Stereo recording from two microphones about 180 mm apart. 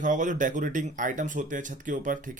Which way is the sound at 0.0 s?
45° right (ahead or behind).